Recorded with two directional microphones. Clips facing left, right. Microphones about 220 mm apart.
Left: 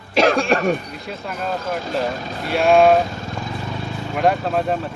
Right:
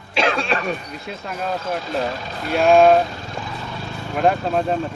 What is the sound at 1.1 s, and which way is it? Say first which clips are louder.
Speech: left 1 dB; centre (ahead or behind).